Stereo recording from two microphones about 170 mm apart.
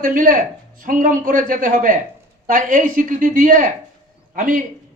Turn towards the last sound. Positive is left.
turn(degrees=-50)  # may be behind; listen again after turning